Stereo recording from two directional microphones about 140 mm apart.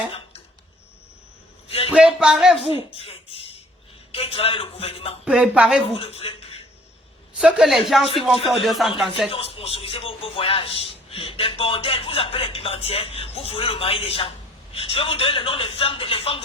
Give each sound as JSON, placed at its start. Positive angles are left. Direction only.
{"t": 1.9, "sound": "speech", "side_deg": -5}
{"t": 2.6, "sound": "a man's voice", "side_deg": 45}
{"t": 5.2, "sound": "speech", "side_deg": -5}
{"t": 5.9, "sound": "a man's voice", "side_deg": 45}
{"t": 7.3, "sound": "speech", "side_deg": -5}
{"t": 9.3, "sound": "a man's voice", "side_deg": 45}